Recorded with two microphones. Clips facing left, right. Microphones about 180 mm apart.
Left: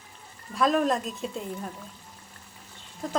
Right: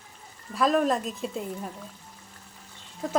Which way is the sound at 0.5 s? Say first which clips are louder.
Even; centre (ahead or behind).